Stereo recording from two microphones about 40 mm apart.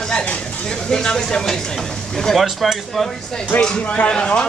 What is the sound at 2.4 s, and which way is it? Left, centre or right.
Speech, centre.